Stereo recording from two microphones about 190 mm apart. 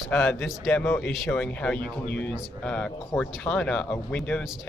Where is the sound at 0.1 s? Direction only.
5° left (ahead or behind).